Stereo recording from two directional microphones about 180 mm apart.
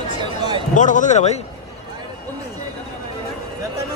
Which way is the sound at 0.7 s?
45° left (ahead or behind).